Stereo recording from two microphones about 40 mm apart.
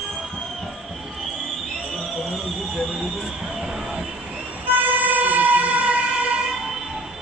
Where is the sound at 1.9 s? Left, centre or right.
Centre.